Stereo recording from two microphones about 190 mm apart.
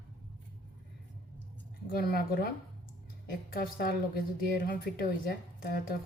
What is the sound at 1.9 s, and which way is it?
Speech, 50° left (ahead or behind).